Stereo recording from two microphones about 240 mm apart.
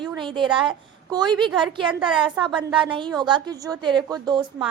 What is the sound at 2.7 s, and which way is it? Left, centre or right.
A woman's voice, centre.